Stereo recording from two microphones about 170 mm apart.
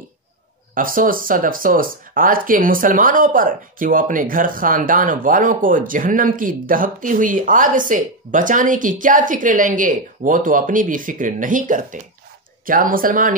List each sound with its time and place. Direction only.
0.7 s speech: 55° right (ahead or behind)